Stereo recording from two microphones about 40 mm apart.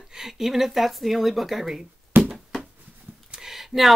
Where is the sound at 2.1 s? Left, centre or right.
Right.